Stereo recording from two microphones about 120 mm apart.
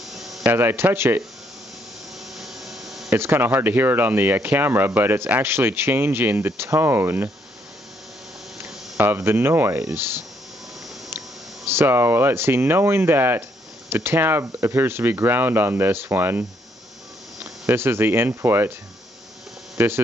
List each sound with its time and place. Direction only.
0.1 s a sound: centre (ahead or behind)
0.5 s speech: 20° right (ahead or behind)
2.3 s a sound: centre (ahead or behind)
3.1 s speech: 20° right (ahead or behind)
8.9 s speech: 20° right (ahead or behind)
11.7 s speech: 20° right (ahead or behind)